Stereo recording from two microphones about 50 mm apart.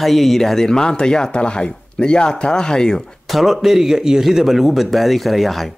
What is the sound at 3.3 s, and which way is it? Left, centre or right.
Speech, centre.